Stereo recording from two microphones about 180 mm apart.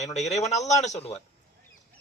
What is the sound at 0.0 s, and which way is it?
A man's voice, 40° left (ahead or behind).